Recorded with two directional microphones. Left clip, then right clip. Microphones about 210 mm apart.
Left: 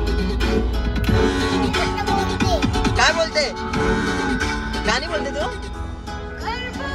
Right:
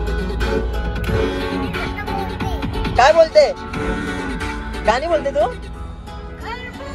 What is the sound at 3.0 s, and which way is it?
Speech, 20° right (ahead or behind).